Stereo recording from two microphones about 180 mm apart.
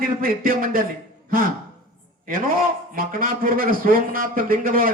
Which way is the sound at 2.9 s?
50° right (ahead or behind).